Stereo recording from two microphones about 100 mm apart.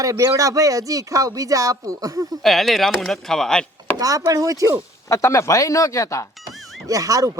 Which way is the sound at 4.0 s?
35° right (ahead or behind).